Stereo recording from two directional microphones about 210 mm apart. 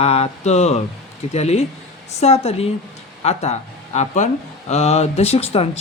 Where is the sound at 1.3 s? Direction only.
30° left (ahead or behind).